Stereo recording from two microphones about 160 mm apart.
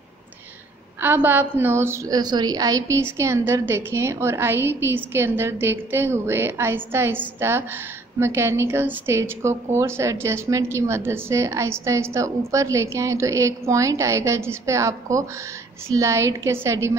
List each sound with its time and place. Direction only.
1.0 s a woman's voice: 10° right (ahead or behind)